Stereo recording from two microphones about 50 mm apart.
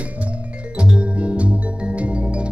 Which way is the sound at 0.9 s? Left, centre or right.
Right.